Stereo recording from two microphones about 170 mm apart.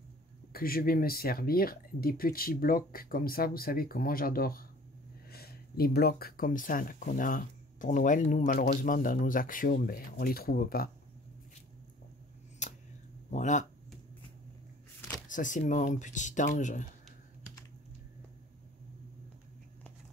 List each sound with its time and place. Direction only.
0.5 s speech: 60° left (ahead or behind)
12.6 s a sound: 45° left (ahead or behind)
13.3 s speech: 45° left (ahead or behind)
15.2 s speech: 50° left (ahead or behind)